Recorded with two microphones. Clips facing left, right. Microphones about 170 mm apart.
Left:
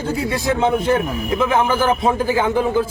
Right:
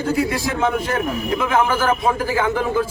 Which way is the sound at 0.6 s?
25° left (ahead or behind).